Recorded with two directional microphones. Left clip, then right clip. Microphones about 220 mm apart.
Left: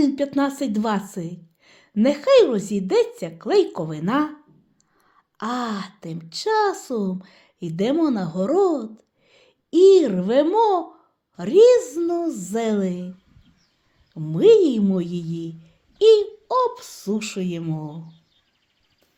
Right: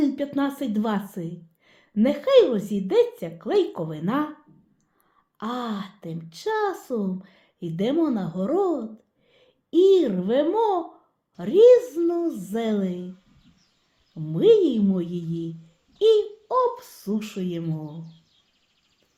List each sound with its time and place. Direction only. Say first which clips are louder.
0.0 s a woman's voice: left 4 dB; 30° left (ahead or behind)
14.1 s a woman's voice: left 3 dB; 30° left (ahead or behind)